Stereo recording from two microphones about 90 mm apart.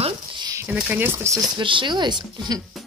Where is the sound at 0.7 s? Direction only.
20° right (ahead or behind).